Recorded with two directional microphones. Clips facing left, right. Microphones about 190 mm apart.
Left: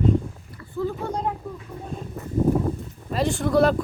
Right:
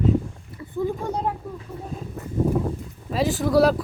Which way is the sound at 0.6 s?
20° right (ahead or behind).